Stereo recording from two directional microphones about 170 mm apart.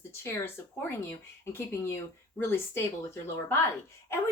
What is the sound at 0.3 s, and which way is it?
Speech, 15° left (ahead or behind).